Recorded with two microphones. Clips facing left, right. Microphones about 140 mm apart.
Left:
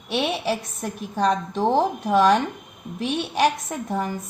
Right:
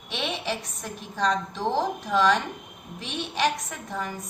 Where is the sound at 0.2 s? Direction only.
40° left (ahead or behind).